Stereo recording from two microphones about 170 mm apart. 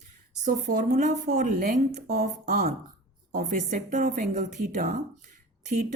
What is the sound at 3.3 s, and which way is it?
A woman's voice, 50° right (ahead or behind).